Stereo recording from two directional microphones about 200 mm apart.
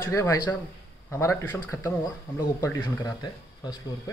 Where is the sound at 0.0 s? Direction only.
15° left (ahead or behind).